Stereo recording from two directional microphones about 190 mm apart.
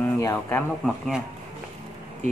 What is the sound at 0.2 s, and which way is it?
Speech, 10° left (ahead or behind).